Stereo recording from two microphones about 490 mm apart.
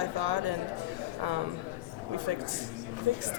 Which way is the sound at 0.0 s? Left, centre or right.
Right.